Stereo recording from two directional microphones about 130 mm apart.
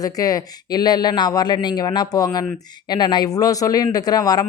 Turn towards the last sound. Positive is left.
turn(degrees=30)  # may be behind; listen again after turning